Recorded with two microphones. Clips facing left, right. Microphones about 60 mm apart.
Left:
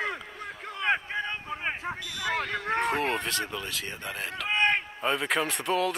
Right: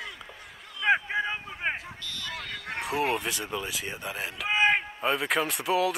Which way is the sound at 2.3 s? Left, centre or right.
Left.